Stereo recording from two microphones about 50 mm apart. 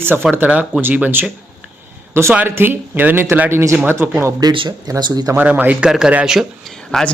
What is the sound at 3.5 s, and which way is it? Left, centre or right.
Speech, right.